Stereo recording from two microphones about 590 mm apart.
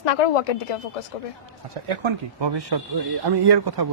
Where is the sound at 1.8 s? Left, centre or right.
Right.